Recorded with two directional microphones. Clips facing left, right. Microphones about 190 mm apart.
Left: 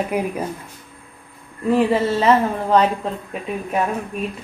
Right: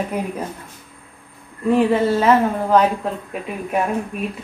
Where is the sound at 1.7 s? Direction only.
Centre (ahead or behind).